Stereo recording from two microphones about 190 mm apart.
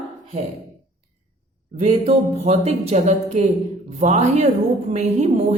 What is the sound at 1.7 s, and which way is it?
A woman's voice, 35° right (ahead or behind).